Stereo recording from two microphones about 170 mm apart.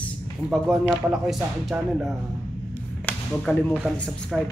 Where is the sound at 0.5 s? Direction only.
Centre (ahead or behind).